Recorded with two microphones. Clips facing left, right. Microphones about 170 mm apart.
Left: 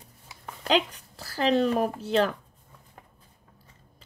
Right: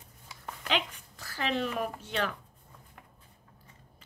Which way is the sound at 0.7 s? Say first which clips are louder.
Left 7 dB; 35° left (ahead or behind).